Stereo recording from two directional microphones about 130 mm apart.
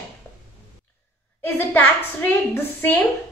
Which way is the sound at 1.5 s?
15° left (ahead or behind).